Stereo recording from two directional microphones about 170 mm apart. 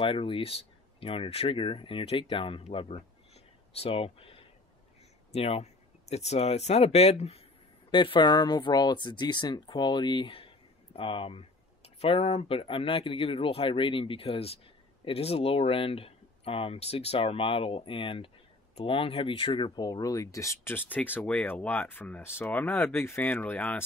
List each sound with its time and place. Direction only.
0.0 s speech: 30° left (ahead or behind); by 23.8 s 10° left (ahead or behind)